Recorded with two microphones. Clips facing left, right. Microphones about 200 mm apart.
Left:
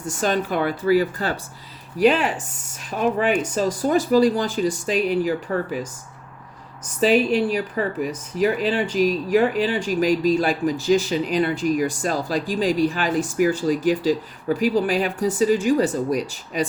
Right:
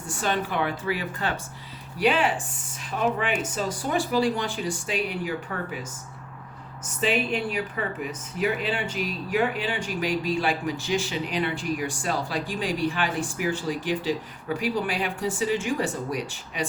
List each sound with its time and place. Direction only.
0.1 s speech: 40° left (ahead or behind)
7.0 s speech: 40° left (ahead or behind)